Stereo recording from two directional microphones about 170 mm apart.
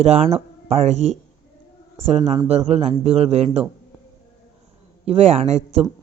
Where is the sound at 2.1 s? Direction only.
25° right (ahead or behind).